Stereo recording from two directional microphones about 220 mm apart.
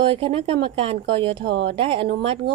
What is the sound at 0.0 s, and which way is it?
A woman's voice, 25° right (ahead or behind).